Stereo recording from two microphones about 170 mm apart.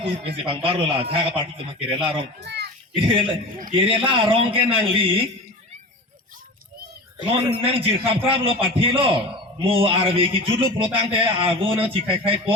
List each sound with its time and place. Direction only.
0.0 s a man's voice: 35° right (ahead or behind)
2.4 s children playing: 75° right (ahead or behind)
2.9 s a man's voice: 30° right (ahead or behind)
7.5 s a man's voice: 35° right (ahead or behind)